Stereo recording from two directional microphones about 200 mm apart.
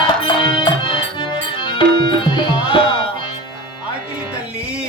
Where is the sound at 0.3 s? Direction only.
25° left (ahead or behind).